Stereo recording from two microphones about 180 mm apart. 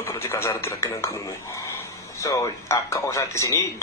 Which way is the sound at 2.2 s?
15° left (ahead or behind).